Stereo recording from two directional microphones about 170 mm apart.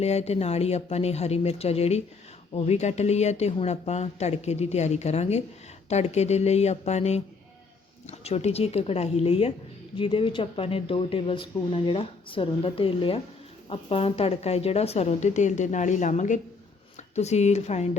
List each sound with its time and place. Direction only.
0.0 s a woman's voice: 40° left (ahead or behind)